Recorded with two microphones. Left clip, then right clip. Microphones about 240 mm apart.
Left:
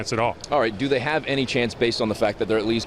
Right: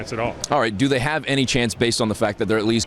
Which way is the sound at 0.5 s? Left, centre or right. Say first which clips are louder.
Right 3 dB; right.